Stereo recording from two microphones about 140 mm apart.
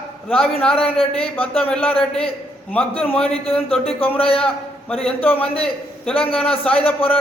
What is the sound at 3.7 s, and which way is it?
Speech, 45° left (ahead or behind).